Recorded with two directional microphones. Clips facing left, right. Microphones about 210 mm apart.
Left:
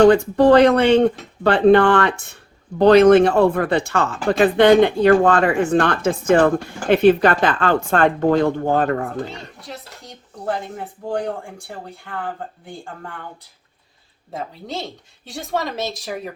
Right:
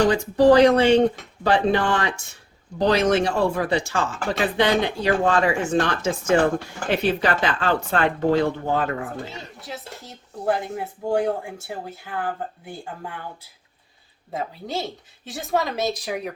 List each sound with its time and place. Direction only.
0.0 s speech: 60° left (ahead or behind)
9.6 s speech: centre (ahead or behind)
14.3 s speech: centre (ahead or behind)